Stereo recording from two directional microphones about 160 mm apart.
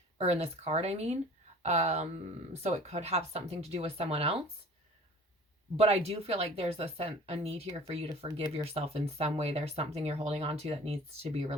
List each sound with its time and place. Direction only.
0.2 s speech: 40° right (ahead or behind)
5.7 s speech: 40° right (ahead or behind)